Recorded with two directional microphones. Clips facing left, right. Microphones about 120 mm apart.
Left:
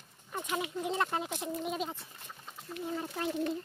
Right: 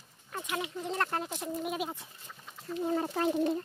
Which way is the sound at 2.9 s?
50° right (ahead or behind).